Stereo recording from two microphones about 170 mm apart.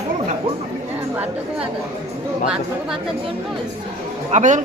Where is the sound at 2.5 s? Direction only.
5° right (ahead or behind).